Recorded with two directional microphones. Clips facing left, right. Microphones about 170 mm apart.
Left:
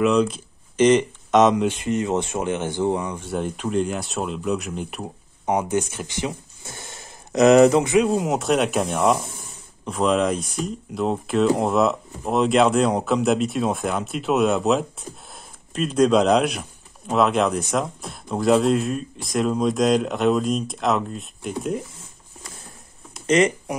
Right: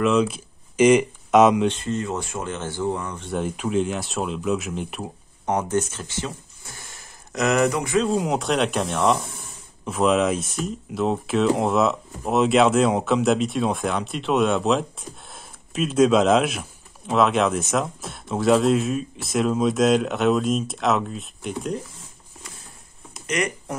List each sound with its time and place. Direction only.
0.0 s speech: 5° right (ahead or behind)
1.6 s speech: 15° left (ahead or behind)
3.3 s speech: centre (ahead or behind)
5.4 s speech: 10° left (ahead or behind)
8.0 s speech: 5° left (ahead or behind)
23.2 s speech: 25° left (ahead or behind)